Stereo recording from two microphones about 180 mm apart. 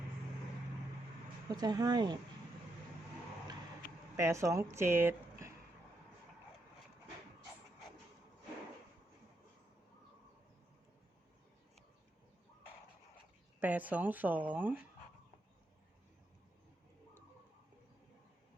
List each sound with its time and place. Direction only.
1.5 s speech: 20° right (ahead or behind)
4.2 s speech: 15° right (ahead or behind)
13.6 s speech: 10° right (ahead or behind)